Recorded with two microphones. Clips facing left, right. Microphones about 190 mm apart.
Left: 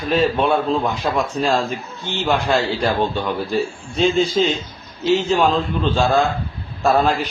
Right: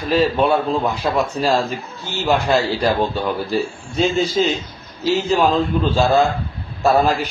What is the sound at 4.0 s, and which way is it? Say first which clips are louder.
A man's voice: left 1 dB; 5° right (ahead or behind).